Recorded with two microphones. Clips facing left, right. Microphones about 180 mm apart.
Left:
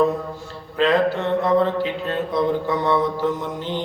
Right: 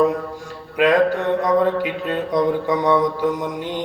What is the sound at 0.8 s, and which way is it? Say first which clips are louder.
Mantra: right 2 dB; 15° right (ahead or behind).